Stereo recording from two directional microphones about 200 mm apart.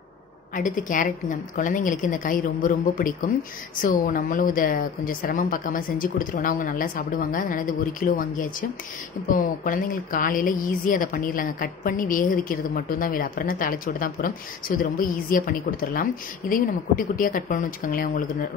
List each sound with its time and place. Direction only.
0.6 s a woman's voice: 40° left (ahead or behind)